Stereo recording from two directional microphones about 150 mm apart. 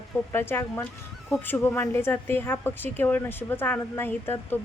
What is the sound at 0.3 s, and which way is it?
A woman's voice, 15° left (ahead or behind).